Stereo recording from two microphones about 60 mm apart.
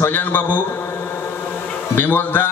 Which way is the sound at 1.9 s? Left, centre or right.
Left.